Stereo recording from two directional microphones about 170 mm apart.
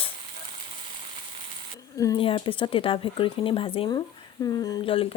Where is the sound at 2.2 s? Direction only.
30° left (ahead or behind).